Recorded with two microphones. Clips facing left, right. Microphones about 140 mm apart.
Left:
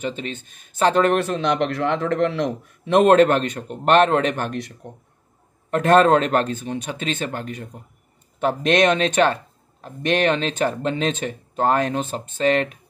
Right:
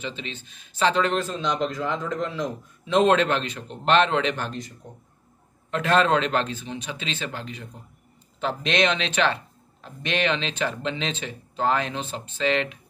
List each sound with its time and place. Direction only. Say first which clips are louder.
0.0 s a man's voice: left 6 dB; 50° left (ahead or behind); by 4.7 s 65° left (ahead or behind)
5.7 s a man's voice: left 6 dB; 50° left (ahead or behind)